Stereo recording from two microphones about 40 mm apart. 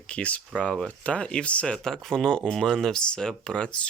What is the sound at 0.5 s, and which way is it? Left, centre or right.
Speech, left.